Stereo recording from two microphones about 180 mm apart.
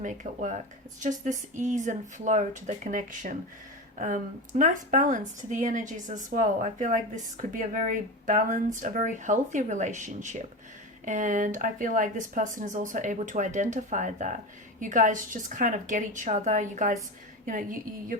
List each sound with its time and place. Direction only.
0.0 s speech: 45° right (ahead or behind)